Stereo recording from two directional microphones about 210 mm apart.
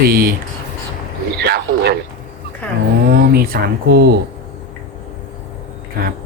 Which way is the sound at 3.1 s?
45° right (ahead or behind).